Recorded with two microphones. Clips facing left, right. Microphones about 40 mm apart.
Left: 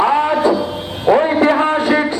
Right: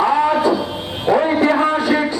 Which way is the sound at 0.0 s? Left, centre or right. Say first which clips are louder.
Left 1 dB; left.